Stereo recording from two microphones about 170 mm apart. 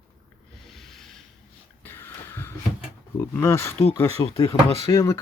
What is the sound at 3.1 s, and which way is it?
Speech, 15° left (ahead or behind).